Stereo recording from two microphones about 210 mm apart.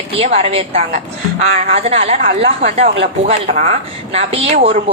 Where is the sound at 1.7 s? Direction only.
30° right (ahead or behind).